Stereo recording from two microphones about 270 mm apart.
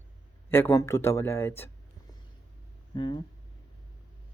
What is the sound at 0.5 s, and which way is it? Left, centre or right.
Speech, centre.